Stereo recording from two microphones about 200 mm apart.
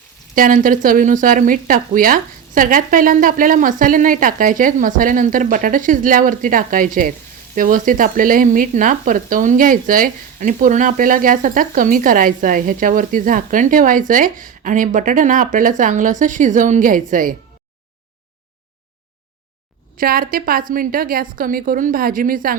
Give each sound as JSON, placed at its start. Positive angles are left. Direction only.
{"t": 0.3, "sound": "speech", "side_deg": -45}
{"t": 20.0, "sound": "speech", "side_deg": -45}